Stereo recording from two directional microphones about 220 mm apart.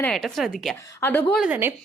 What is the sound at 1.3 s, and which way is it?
Speech, 5° right (ahead or behind).